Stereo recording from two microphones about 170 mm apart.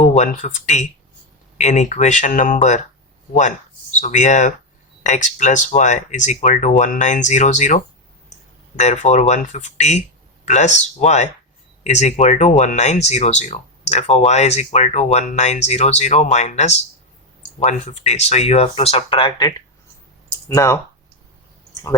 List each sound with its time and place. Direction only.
0.0 s speech: 45° left (ahead or behind)
4.0 s speech: 45° left (ahead or behind); by 20.7 s 15° left (ahead or behind)